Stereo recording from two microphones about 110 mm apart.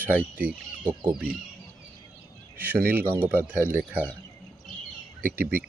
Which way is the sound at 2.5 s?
15° right (ahead or behind).